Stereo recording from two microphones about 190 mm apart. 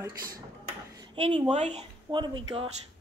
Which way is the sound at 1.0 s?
25° right (ahead or behind).